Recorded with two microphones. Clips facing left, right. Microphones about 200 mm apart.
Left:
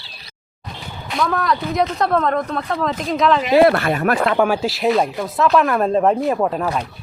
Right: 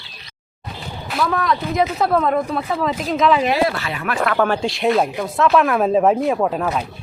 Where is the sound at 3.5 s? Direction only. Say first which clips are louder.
Left 7 dB; 55° left (ahead or behind).